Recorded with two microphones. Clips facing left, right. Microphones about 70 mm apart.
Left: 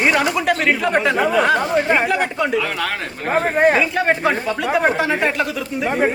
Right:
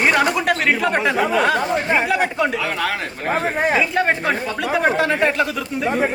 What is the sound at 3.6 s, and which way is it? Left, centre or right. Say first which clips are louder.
Speech: left 6 dB; left.